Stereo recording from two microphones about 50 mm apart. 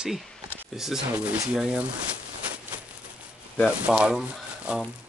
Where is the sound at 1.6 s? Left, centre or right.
Right.